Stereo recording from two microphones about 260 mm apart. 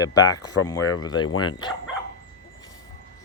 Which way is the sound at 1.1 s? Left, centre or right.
Left.